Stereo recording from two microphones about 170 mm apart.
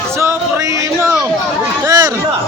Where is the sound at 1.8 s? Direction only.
20° right (ahead or behind).